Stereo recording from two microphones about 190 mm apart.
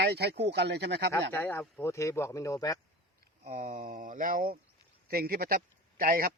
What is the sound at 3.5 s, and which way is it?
Speech, 45° right (ahead or behind).